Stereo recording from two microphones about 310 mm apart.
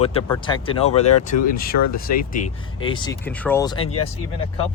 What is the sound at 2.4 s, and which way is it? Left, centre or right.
Speech, left.